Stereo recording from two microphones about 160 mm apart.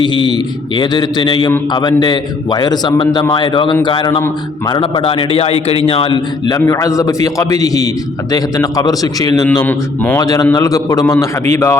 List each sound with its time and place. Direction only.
0.0 s a man's voice: 30° left (ahead or behind)
9.6 s a man's voice: 10° left (ahead or behind)
10.2 s a man's voice: 25° left (ahead or behind)